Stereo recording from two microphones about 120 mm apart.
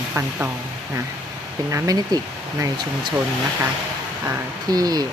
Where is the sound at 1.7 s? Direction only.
30° right (ahead or behind).